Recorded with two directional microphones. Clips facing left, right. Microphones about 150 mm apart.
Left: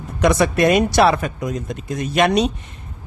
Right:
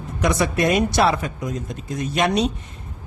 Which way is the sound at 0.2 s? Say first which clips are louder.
Left 4 dB; 70° left (ahead or behind).